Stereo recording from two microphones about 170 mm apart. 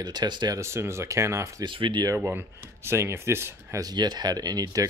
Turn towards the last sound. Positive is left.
turn(degrees=-20)  # may be behind; listen again after turning